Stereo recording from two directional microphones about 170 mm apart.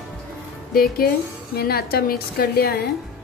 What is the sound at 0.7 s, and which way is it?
A woman's voice, 60° left (ahead or behind).